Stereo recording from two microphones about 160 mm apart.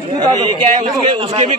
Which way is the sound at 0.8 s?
40° right (ahead or behind).